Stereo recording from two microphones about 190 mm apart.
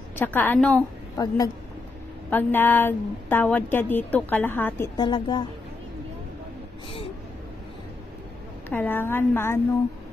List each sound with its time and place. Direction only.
0.2 s a woman's voice: 10° left (ahead or behind)
5.0 s a woman's voice: 25° left (ahead or behind)
8.6 s a woman's voice: 10° left (ahead or behind)